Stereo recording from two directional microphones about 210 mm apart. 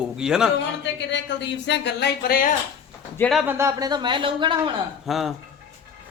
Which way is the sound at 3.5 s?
15° right (ahead or behind).